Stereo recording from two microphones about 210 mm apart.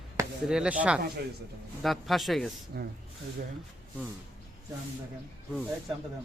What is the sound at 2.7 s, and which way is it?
Speech, 50° right (ahead or behind).